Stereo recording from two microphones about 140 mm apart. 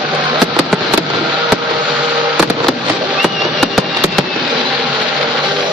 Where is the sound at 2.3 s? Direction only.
Centre (ahead or behind).